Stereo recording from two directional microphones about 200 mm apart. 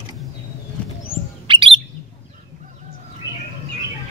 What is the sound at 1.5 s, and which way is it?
Chirp, 25° right (ahead or behind).